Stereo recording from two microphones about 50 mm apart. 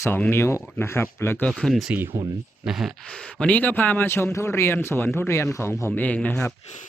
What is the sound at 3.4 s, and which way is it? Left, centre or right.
Speech, left.